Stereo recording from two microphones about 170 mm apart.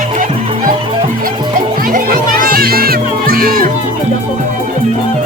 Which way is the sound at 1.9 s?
55° right (ahead or behind).